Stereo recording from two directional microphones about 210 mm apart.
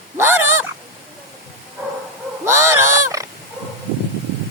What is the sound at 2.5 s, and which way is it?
Pig, 15° right (ahead or behind).